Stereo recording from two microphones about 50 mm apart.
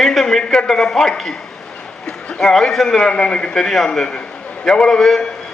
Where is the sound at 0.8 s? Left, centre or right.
Centre.